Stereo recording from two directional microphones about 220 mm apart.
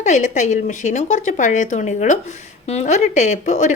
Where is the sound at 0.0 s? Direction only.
35° left (ahead or behind).